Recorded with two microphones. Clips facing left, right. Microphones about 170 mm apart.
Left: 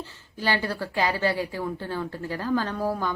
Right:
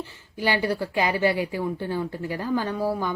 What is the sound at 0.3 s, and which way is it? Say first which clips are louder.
Speech: right 3 dB; 15° right (ahead or behind).